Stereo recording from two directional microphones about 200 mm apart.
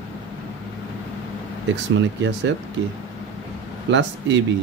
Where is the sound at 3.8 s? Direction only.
65° right (ahead or behind).